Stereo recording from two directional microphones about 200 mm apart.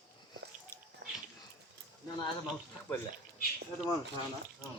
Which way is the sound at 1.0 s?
55° right (ahead or behind).